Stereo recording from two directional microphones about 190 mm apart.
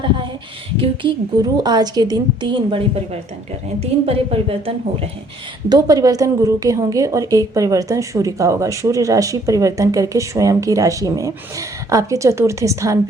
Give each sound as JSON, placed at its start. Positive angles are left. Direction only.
{"t": 0.8, "sound": "a woman's voice", "side_deg": -25}
{"t": 5.6, "sound": "a woman's voice", "side_deg": -20}